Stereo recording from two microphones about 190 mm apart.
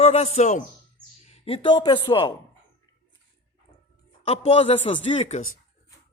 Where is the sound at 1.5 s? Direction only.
25° left (ahead or behind).